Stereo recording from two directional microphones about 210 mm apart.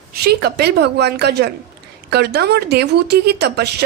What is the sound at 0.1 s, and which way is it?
A woman's voice, 50° right (ahead or behind).